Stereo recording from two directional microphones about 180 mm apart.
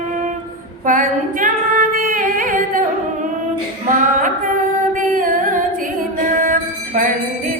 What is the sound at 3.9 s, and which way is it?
Female singing, 45° right (ahead or behind).